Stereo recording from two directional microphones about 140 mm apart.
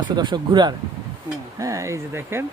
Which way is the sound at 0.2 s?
30° right (ahead or behind).